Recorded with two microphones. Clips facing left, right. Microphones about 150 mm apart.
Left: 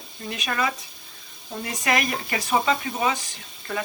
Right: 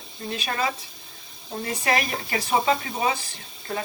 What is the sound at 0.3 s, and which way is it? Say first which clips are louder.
Speech: even; 30° right (ahead or behind).